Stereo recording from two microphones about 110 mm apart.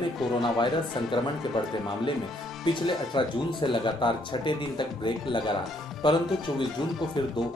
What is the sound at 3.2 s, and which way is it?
Speech, 45° left (ahead or behind).